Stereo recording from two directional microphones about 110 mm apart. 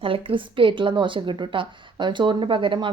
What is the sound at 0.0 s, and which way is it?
A woman's voice, 55° right (ahead or behind).